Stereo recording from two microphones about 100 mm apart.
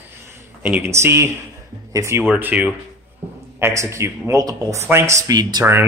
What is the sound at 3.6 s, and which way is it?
Speech, 25° right (ahead or behind).